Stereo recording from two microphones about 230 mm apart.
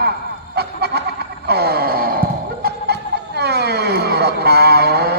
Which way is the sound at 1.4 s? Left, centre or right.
Right.